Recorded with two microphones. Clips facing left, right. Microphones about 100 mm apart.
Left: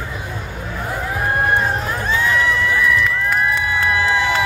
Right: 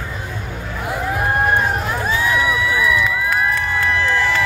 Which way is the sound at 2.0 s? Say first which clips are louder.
Left 1 dB; 10° right (ahead or behind).